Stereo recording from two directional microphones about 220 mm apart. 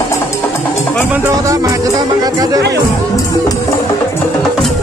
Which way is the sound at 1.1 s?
15° right (ahead or behind).